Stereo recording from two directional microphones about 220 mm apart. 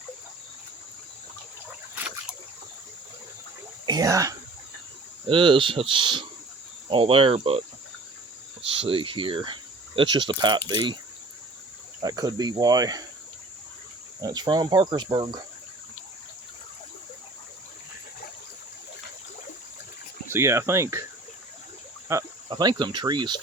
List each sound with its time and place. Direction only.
3.8 s speech: 15° right (ahead or behind)
8.7 s speech: 25° right (ahead or behind)
11.9 s speech: 15° right (ahead or behind)
14.2 s speech: 20° right (ahead or behind)
20.3 s speech: 10° right (ahead or behind)
22.1 s speech: 20° right (ahead or behind)